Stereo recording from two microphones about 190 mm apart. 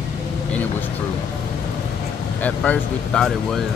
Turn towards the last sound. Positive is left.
turn(degrees=0)  # may be behind; listen again after turning